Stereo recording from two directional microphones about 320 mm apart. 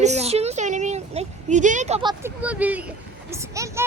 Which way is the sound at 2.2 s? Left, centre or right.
Centre.